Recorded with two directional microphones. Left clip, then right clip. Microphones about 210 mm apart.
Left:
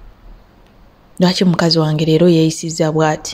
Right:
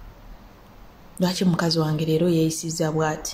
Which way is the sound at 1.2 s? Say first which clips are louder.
Left 9 dB; 35° left (ahead or behind).